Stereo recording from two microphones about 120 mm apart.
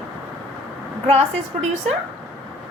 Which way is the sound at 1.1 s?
60° right (ahead or behind).